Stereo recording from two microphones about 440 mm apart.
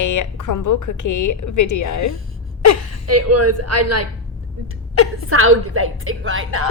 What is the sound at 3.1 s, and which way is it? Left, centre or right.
Speech, right.